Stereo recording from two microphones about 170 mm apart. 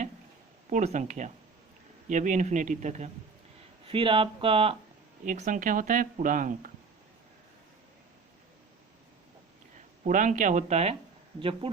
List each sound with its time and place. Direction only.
0.7 s speech: 45° right (ahead or behind)
3.8 s speech: 30° right (ahead or behind)
5.2 s speech: 50° right (ahead or behind)
10.0 s speech: 50° right (ahead or behind); by 11.7 s 30° right (ahead or behind)